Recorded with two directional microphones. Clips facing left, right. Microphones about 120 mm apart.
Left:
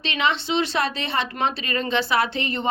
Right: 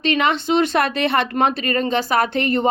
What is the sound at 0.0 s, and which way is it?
Speech, 50° right (ahead or behind).